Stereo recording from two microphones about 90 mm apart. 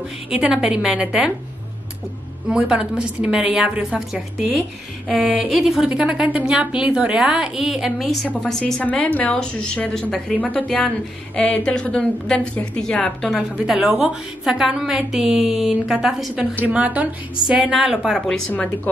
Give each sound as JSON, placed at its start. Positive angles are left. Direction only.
{"t": 0.3, "sound": "a woman's voice", "side_deg": -10}
{"t": 2.5, "sound": "a woman's voice", "side_deg": -10}
{"t": 5.2, "sound": "a woman's voice", "side_deg": -5}
{"t": 8.8, "sound": "a woman's voice", "side_deg": 15}
{"t": 13.4, "sound": "a woman's voice", "side_deg": -10}
{"t": 16.6, "sound": "a woman's voice", "side_deg": -15}